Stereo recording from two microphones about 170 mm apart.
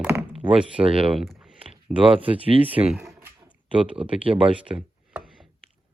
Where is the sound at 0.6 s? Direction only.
5° right (ahead or behind).